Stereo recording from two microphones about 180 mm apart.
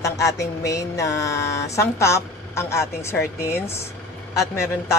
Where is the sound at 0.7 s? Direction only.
20° left (ahead or behind).